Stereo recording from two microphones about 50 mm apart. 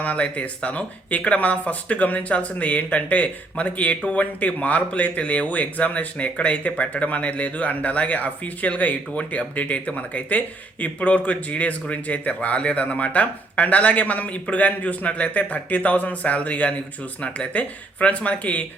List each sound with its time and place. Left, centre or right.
0.0 s speech: left